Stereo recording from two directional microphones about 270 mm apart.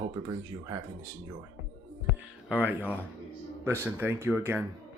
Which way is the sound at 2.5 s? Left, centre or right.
Centre.